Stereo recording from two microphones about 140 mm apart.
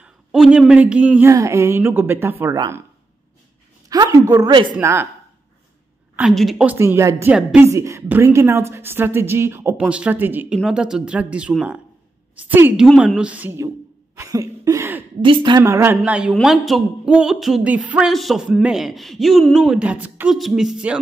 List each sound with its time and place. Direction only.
0.0 s a woman's voice: 5° right (ahead or behind)
1.3 s a woman's voice: 20° right (ahead or behind)
3.9 s a woman's voice: 25° right (ahead or behind)
4.7 s a woman's voice: 15° right (ahead or behind)
6.6 s a woman's voice: 15° right (ahead or behind)
14.1 s a sound: 25° right (ahead or behind)
15.2 s a woman's voice: 35° right (ahead or behind)
15.6 s a woman's voice: 20° right (ahead or behind)
16.0 s a sound: 5° right (ahead or behind)